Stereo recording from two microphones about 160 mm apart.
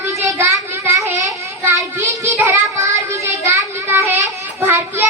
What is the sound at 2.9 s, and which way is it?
A child's voice, 20° right (ahead or behind).